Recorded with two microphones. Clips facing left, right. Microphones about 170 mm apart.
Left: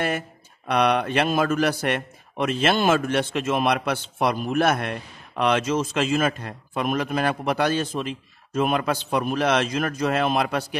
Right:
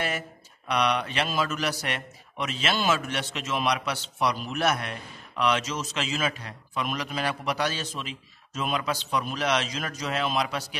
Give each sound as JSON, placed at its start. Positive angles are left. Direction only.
{"t": 0.7, "sound": "a man's voice", "side_deg": 55}